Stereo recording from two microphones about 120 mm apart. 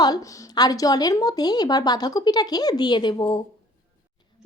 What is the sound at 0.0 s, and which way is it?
Speech, 35° left (ahead or behind).